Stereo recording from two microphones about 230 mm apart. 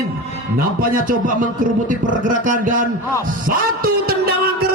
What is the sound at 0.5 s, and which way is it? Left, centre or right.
Speech, right.